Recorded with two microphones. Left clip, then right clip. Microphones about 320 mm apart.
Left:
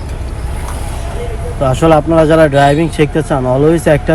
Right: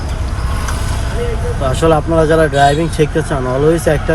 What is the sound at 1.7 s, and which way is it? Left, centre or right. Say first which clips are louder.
Speech: left 3 dB; centre.